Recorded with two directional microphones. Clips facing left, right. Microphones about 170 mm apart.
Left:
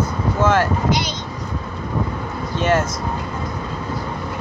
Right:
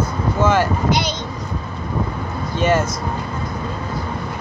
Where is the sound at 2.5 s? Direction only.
Centre (ahead or behind).